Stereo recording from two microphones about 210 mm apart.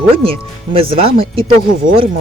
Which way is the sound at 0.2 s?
25° right (ahead or behind).